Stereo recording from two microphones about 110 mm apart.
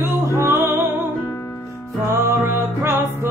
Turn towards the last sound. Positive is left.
turn(degrees=-20)  # may be behind; listen again after turning